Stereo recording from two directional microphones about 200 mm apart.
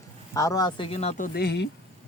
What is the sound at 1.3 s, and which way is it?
Speech, 55° left (ahead or behind).